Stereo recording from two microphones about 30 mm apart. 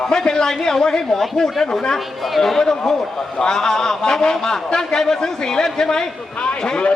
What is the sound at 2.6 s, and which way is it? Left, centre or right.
A man's voice, centre.